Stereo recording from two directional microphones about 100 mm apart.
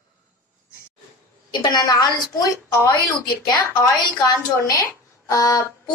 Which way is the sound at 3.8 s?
35° left (ahead or behind).